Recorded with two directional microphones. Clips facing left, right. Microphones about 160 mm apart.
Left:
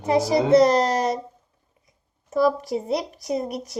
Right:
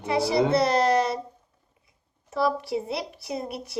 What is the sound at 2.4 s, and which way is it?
A woman's voice, 45° left (ahead or behind).